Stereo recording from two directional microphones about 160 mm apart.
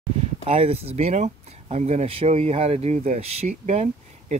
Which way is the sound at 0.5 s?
40° right (ahead or behind).